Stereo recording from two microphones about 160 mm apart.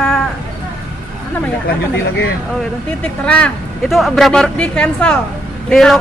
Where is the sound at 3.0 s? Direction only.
5° left (ahead or behind).